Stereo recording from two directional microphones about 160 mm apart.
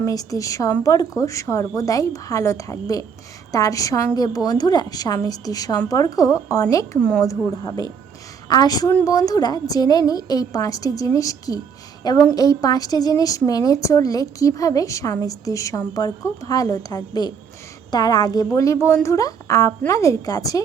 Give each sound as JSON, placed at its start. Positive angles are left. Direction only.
{"t": 0.0, "sound": "a woman's voice", "side_deg": 20}